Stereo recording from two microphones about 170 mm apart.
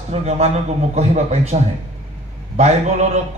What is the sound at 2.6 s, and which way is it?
Speech, 40° right (ahead or behind).